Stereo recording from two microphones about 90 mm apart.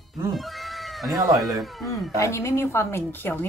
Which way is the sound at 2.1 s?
35° left (ahead or behind).